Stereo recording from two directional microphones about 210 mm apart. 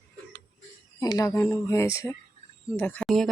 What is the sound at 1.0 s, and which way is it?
Speech, 15° left (ahead or behind).